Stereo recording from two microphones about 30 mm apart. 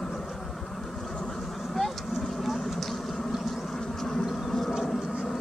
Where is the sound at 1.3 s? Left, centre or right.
Centre.